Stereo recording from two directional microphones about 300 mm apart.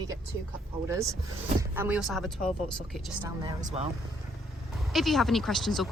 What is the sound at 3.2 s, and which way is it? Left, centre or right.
Speech, centre.